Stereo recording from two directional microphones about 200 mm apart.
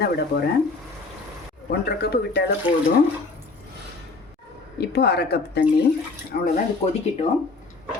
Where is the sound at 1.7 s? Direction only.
55° left (ahead or behind).